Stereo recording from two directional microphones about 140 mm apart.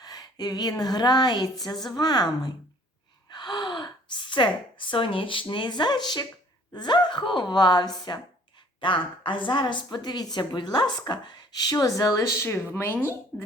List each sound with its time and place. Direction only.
0.0 s a woman's voice: 30° left (ahead or behind)
3.3 s a woman's voice: 30° left (ahead or behind); by 13.1 s 15° left (ahead or behind)